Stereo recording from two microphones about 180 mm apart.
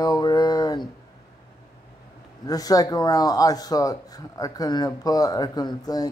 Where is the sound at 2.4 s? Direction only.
20° left (ahead or behind).